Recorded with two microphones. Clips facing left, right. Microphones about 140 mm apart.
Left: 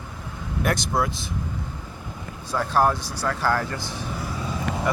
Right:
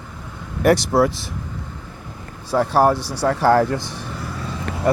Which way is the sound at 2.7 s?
75° right (ahead or behind).